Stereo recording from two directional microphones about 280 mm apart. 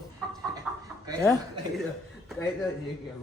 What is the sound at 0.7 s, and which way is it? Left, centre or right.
Chicken, centre.